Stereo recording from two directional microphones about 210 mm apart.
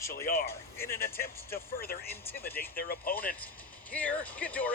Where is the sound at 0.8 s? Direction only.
10° left (ahead or behind).